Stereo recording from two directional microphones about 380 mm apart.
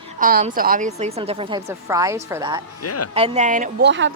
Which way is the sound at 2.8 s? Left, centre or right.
Left.